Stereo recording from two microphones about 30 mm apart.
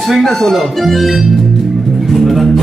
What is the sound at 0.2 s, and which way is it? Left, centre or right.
Music, centre.